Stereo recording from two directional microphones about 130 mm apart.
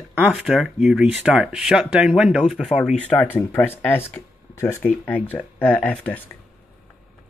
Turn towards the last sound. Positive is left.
turn(degrees=10)  # may be behind; listen again after turning